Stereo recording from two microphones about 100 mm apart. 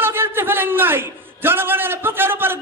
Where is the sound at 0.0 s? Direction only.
20° right (ahead or behind).